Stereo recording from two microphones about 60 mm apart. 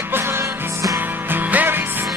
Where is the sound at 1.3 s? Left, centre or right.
Right.